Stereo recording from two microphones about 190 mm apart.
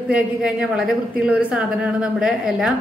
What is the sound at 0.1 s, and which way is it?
A woman's voice, 5° right (ahead or behind).